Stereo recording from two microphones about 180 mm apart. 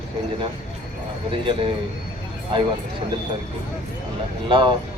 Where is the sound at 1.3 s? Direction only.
30° right (ahead or behind).